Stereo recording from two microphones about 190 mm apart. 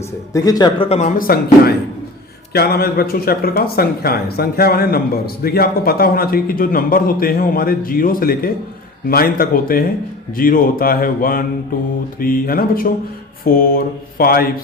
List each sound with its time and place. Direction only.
0.3 s speech: 20° left (ahead or behind); by 14.4 s 50° left (ahead or behind)